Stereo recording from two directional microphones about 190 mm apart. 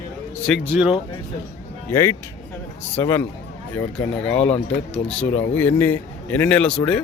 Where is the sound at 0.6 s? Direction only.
10° right (ahead or behind).